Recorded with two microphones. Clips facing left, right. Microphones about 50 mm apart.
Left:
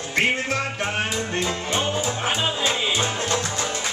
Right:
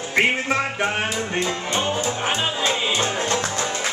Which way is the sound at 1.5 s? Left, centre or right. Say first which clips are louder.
Right 1 dB; centre.